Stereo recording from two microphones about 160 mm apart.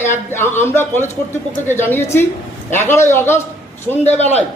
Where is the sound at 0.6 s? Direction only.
15° left (ahead or behind).